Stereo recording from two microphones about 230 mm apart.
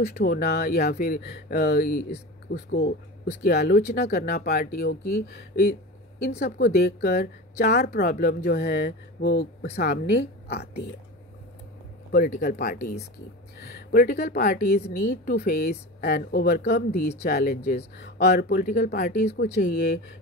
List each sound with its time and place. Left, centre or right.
0.0 s a woman's voice: left
12.1 s a woman's voice: left